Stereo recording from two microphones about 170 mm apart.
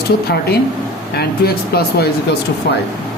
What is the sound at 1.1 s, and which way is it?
Speech, 70° left (ahead or behind).